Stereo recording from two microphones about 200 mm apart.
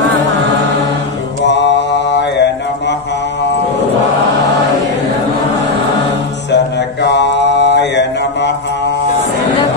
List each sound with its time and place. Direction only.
1.4 s mantra: 60° left (ahead or behind)
6.5 s mantra: 60° left (ahead or behind)